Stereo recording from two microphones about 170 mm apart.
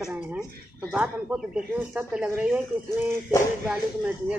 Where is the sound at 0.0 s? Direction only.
5° right (ahead or behind).